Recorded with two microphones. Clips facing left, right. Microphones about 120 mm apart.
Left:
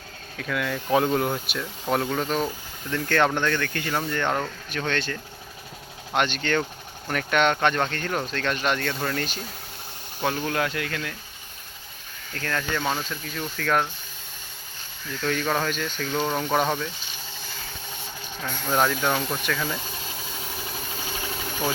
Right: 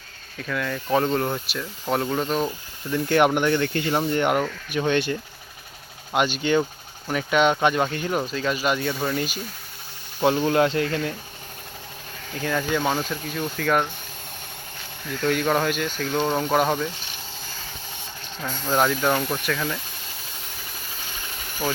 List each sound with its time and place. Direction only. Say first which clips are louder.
0.3 s speech: even; centre (ahead or behind)
2.9 s speech: right 3 dB; 15° right (ahead or behind)
6.1 s speech: right 3 dB; 5° right (ahead or behind)
10.2 s speech: right 7 dB; 20° right (ahead or behind)
12.3 s speech: right 4 dB; 10° right (ahead or behind)
15.2 s speech: right 4 dB; 5° right (ahead or behind)
18.4 s speech: right 2 dB; centre (ahead or behind)